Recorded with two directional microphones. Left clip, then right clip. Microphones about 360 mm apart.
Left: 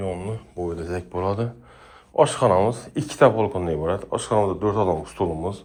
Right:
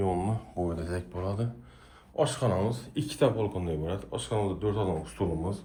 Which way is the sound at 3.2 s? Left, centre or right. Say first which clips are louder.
Left 10 dB; left.